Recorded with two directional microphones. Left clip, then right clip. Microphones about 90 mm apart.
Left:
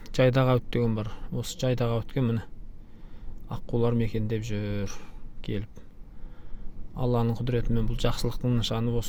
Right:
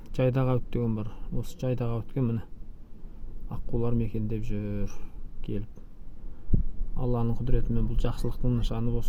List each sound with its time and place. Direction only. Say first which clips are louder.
0.0 s speech: left 5 dB; 15° left (ahead or behind)
3.5 s speech: left 4 dB; 20° left (ahead or behind)
6.9 s speech: left 4 dB; 20° left (ahead or behind)